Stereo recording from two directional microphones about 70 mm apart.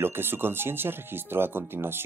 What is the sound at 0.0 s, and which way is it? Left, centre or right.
Speech, right.